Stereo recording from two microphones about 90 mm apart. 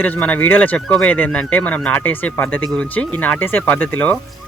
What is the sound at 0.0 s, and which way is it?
Speech, 20° left (ahead or behind).